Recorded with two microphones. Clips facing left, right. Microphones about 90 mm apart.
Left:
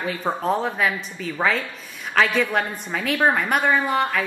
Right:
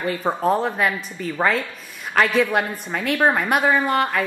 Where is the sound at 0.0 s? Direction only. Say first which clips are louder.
Right 3 dB; centre (ahead or behind).